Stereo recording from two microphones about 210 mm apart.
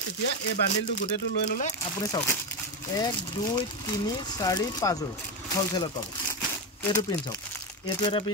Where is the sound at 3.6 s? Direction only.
20° left (ahead or behind).